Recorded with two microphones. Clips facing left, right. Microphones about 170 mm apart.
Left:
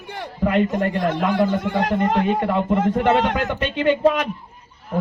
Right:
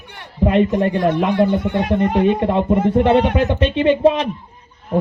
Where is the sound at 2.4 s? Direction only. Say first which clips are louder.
Right 3 dB; 30° right (ahead or behind).